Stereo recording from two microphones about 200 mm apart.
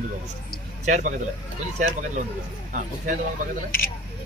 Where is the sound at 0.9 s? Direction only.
40° right (ahead or behind).